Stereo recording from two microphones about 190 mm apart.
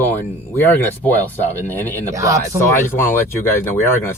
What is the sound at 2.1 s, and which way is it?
Speech, 15° right (ahead or behind).